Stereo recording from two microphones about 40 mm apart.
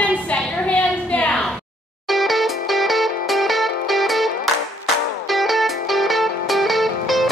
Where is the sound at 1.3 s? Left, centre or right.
Left.